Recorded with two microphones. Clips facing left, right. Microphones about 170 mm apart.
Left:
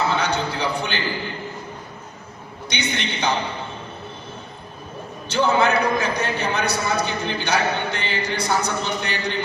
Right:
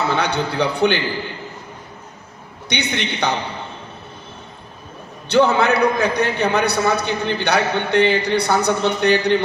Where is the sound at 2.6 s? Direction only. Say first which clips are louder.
Right 3 dB; 65° right (ahead or behind).